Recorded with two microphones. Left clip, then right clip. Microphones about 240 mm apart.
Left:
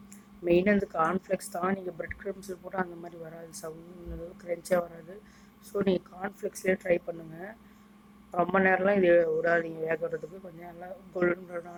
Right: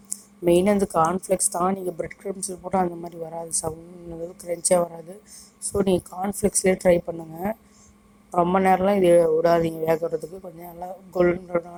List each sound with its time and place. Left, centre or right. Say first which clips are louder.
0.1 s a woman's voice: right 6 dB; right